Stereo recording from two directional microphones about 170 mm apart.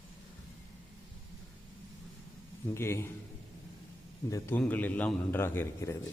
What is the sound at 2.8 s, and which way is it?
Speech, 15° left (ahead or behind).